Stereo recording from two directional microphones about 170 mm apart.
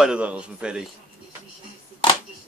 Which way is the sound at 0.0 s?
5° right (ahead or behind).